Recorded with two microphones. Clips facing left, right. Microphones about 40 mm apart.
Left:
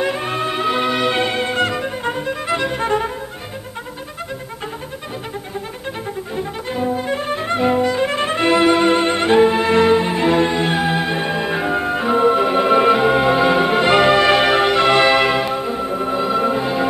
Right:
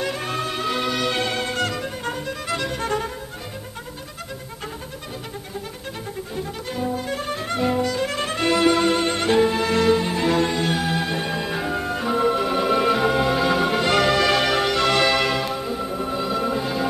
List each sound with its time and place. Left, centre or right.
0.0 s music: left
6.3 s music: left